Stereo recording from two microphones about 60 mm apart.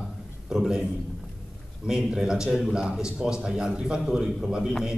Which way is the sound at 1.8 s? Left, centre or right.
Centre.